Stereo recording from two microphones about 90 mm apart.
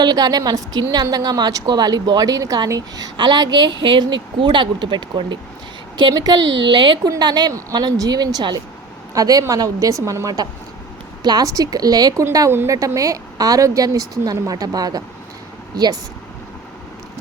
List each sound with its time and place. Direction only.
0.0 s a woman's voice: 50° right (ahead or behind)
3.2 s speech: 50° right (ahead or behind)
6.0 s speech: 50° right (ahead or behind)
7.0 s a woman's voice: 50° right (ahead or behind)
12.5 s a woman's voice: 25° right (ahead or behind)
12.7 s a woman's voice: 40° right (ahead or behind)